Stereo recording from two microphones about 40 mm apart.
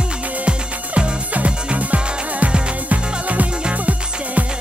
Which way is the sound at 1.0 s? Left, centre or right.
Right.